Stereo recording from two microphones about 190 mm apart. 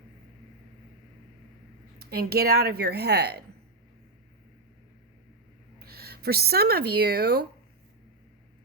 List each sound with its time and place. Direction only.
2.0 s a woman's voice: 55° right (ahead or behind)
5.8 s speech: 55° right (ahead or behind)